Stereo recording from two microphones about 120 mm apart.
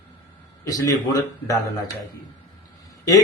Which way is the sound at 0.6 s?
30° left (ahead or behind).